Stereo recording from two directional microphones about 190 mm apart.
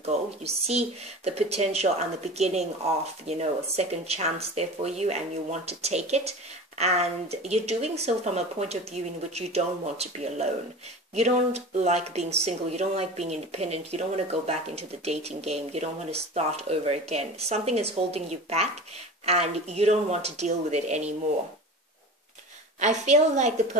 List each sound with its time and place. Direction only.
0.0 s speech: 35° right (ahead or behind)
22.8 s speech: 40° right (ahead or behind)